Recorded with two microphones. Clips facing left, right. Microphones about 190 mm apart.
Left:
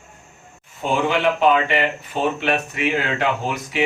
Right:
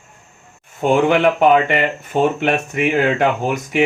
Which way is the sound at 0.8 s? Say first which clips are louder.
Right 6 dB; 55° right (ahead or behind).